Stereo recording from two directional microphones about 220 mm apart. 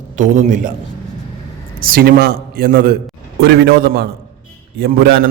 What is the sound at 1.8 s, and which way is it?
A man's voice, 40° right (ahead or behind).